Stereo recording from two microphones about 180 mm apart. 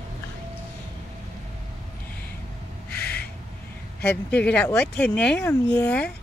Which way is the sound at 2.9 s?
60° left (ahead or behind).